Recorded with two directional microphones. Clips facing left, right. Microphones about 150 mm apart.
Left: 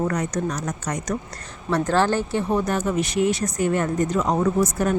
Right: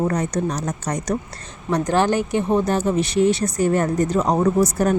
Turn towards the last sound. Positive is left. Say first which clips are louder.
# right 3 dB
turn(degrees=-35)  # may be behind; listen again after turning